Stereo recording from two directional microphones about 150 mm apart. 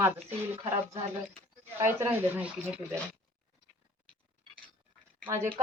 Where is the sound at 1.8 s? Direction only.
15° right (ahead or behind).